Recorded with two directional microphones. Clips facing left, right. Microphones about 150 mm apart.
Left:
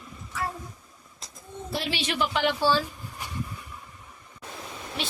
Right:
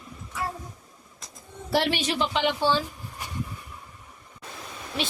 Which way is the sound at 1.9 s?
40° right (ahead or behind).